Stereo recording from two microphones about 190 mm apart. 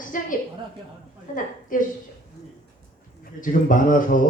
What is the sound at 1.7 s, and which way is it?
Speech, 45° left (ahead or behind).